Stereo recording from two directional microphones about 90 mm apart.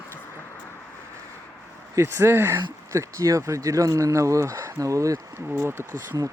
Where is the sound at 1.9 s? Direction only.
30° right (ahead or behind).